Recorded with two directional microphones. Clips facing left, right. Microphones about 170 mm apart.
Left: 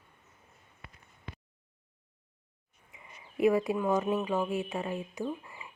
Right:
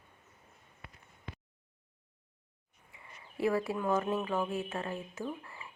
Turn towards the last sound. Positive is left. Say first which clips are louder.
# left 4 dB
turn(degrees=15)  # may be behind; listen again after turning